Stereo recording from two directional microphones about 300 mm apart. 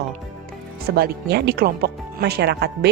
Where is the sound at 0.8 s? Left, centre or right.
Right.